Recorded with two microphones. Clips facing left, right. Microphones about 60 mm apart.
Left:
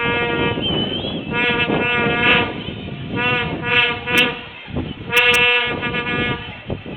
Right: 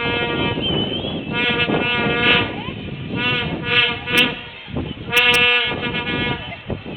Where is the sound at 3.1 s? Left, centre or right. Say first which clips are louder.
Left 2 dB; left.